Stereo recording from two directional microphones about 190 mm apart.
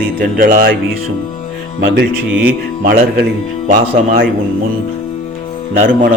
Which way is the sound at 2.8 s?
50° right (ahead or behind).